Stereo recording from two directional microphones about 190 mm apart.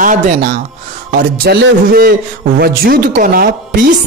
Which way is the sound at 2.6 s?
50° right (ahead or behind).